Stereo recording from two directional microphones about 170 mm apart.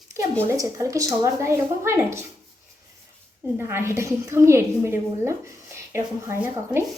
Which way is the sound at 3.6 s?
15° right (ahead or behind).